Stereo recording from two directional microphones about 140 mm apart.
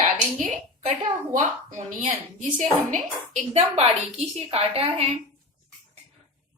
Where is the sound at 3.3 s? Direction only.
50° right (ahead or behind).